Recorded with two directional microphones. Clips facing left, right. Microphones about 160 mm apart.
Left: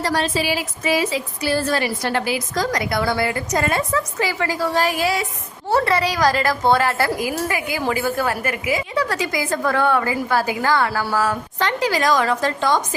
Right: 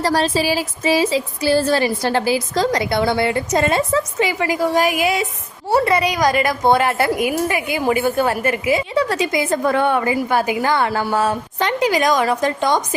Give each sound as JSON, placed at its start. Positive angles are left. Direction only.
{"t": 0.0, "sound": "a woman's voice", "side_deg": -35}